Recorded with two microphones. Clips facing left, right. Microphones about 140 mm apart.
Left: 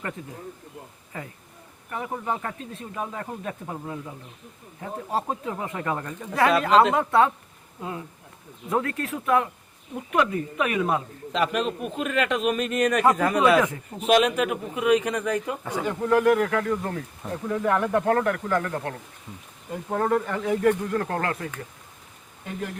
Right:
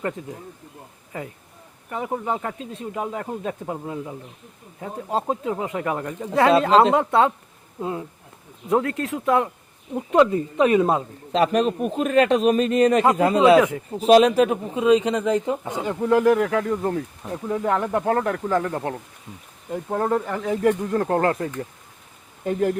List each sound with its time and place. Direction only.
1.9 s speech: 20° right (ahead or behind)